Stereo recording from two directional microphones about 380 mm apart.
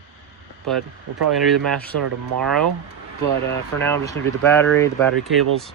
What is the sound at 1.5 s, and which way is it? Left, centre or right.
Speech, centre.